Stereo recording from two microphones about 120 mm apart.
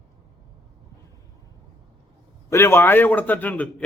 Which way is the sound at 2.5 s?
20° left (ahead or behind).